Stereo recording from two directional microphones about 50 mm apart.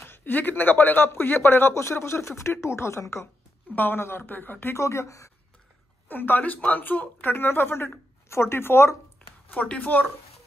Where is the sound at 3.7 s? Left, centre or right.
Left.